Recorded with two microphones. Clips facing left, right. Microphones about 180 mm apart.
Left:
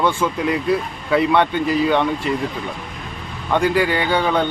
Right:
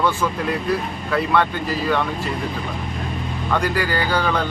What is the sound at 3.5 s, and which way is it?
Speech, 25° left (ahead or behind).